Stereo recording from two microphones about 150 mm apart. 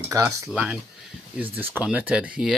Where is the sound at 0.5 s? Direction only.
10° right (ahead or behind).